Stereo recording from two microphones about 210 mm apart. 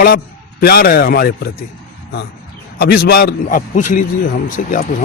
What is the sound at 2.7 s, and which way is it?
Speech, 45° left (ahead or behind).